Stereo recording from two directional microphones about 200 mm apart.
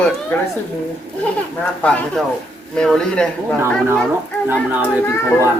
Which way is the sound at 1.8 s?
5° left (ahead or behind).